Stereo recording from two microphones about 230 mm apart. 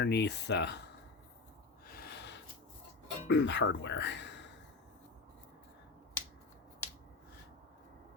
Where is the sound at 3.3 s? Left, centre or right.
Left.